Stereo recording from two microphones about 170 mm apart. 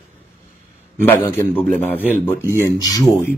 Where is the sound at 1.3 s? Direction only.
10° left (ahead or behind).